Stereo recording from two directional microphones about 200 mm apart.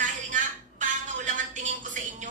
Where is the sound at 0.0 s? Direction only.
40° right (ahead or behind).